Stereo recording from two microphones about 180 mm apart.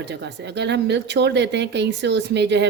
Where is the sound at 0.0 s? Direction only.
70° right (ahead or behind).